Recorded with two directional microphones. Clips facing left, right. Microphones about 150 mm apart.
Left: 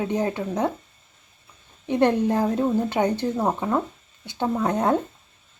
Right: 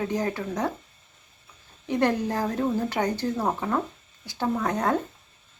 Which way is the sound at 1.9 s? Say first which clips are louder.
Left 4 dB; 20° left (ahead or behind).